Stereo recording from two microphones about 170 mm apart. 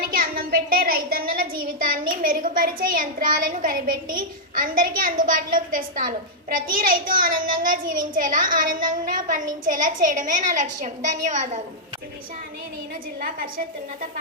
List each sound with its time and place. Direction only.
0.0 s a woman's voice: 55° right (ahead or behind)
13.1 s a woman's voice: 55° right (ahead or behind)